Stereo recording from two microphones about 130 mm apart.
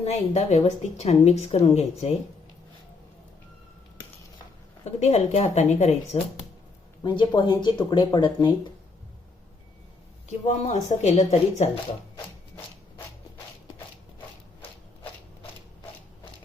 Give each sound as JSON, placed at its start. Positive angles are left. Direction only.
{"t": 0.0, "sound": "a woman's voice", "side_deg": 55}
{"t": 4.9, "sound": "a woman's voice", "side_deg": 55}
{"t": 7.0, "sound": "speech", "side_deg": 35}
{"t": 10.2, "sound": "a woman's voice", "side_deg": 65}